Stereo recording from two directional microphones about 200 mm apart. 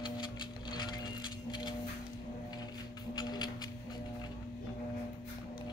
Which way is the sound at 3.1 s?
20° left (ahead or behind).